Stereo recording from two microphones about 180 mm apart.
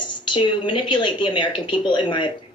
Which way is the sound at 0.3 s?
25° left (ahead or behind).